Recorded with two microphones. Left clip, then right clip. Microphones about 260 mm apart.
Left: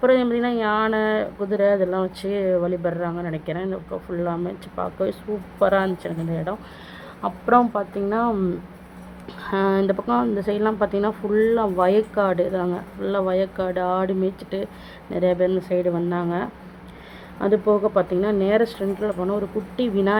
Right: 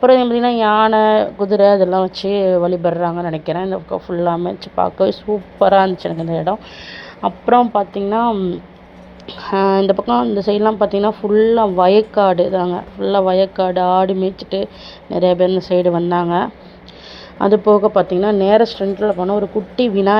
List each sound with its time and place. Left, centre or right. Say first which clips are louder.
0.0 s speech: right 7 dB; centre